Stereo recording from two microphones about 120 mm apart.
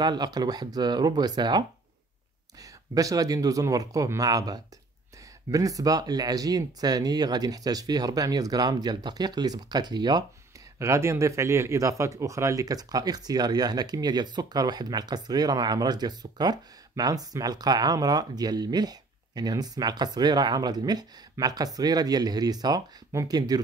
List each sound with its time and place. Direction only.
0.0 s speech: 35° right (ahead or behind)
10.8 s speech: 25° right (ahead or behind)